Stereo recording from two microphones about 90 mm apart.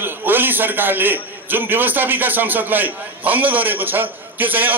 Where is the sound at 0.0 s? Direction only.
25° right (ahead or behind).